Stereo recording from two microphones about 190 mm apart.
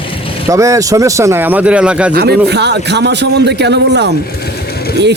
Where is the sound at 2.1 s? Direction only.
55° right (ahead or behind).